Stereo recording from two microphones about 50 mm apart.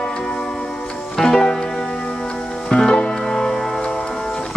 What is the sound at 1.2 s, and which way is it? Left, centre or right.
Music, centre.